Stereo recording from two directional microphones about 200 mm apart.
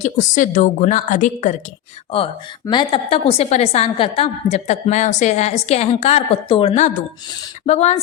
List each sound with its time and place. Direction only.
0.0 s a woman's voice: 40° left (ahead or behind)
2.1 s a woman's voice: 25° left (ahead or behind)